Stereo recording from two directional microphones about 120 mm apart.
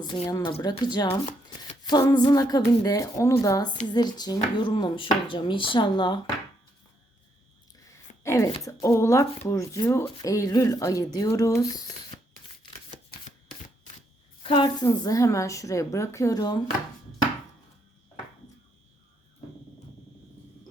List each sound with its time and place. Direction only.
0.3 s speech: 30° left (ahead or behind)
1.7 s a sound: 35° left (ahead or behind)
2.6 s speech: 30° left (ahead or behind)
7.9 s a sound: 25° left (ahead or behind)
8.6 s speech: 25° left (ahead or behind)
14.4 s a woman's voice: 40° left (ahead or behind)
14.8 s speech: 30° left (ahead or behind)